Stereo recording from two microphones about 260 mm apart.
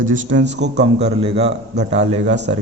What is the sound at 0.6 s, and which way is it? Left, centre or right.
Speech, right.